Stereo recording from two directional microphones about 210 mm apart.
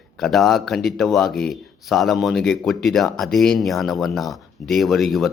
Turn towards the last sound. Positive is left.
turn(degrees=0)  # may be behind; listen again after turning